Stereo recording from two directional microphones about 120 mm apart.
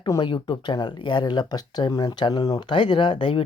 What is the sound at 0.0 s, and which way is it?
Speech, 40° left (ahead or behind).